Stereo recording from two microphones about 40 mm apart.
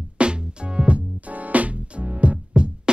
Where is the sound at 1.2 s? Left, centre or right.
Right.